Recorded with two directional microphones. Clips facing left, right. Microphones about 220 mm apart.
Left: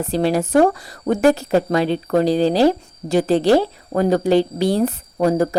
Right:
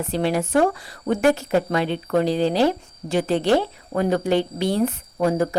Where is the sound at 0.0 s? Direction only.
35° left (ahead or behind).